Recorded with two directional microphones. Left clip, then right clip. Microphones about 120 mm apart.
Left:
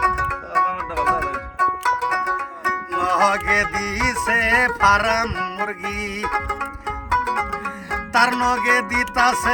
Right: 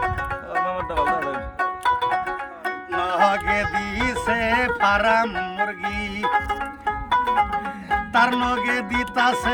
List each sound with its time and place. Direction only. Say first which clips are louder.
0.0 s music: left 5 dB; 15° right (ahead or behind)